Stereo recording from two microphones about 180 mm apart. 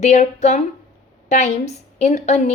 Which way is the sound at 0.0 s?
40° left (ahead or behind).